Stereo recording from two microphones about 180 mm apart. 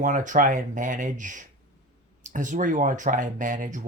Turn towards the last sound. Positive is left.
turn(degrees=-50)  # may be behind; listen again after turning